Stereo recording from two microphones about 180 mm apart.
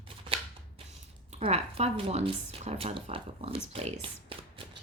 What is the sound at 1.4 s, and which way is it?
Speech, 35° right (ahead or behind).